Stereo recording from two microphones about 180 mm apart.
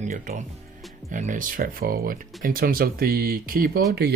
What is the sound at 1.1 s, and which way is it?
Speech, 45° right (ahead or behind).